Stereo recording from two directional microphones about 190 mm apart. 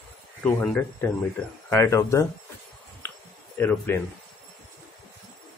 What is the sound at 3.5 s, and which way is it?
Speech, 10° left (ahead or behind).